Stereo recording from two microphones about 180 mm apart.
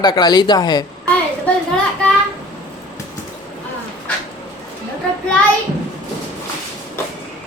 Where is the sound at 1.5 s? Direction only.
10° left (ahead or behind).